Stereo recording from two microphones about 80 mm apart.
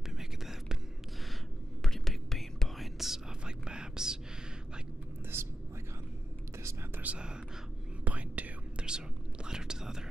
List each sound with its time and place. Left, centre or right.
0.2 s whispering: centre
1.8 s whispering: centre
5.3 s whispering: right
7.0 s whispering: centre